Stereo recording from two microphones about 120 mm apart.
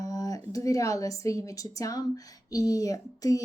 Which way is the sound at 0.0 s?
30° left (ahead or behind).